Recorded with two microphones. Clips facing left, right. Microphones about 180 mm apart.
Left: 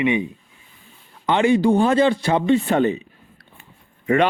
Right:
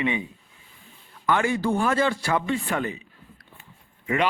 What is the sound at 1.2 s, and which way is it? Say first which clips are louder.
Speech: left 7 dB; 20° left (ahead or behind).